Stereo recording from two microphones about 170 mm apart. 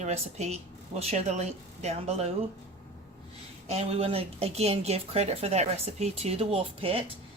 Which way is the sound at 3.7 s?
35° right (ahead or behind).